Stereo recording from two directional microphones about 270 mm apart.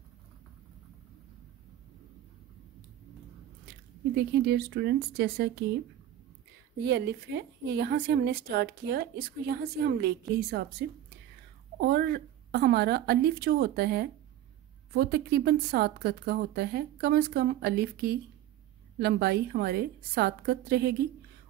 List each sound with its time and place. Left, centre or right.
4.1 s a woman's voice: right
6.8 s a woman's voice: right